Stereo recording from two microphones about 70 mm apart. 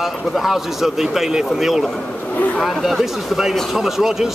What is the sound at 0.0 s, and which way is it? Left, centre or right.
Speech, centre.